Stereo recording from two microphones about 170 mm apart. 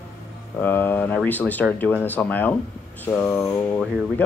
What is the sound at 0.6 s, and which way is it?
Speech, 10° left (ahead or behind).